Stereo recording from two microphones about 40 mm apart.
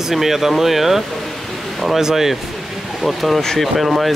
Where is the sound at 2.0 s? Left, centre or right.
Centre.